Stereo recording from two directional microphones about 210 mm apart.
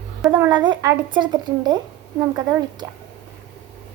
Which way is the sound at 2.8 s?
15° right (ahead or behind).